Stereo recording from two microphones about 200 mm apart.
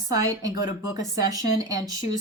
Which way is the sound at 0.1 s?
15° right (ahead or behind).